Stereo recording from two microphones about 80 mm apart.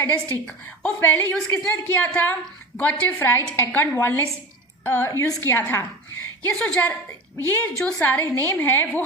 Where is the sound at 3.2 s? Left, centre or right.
Left.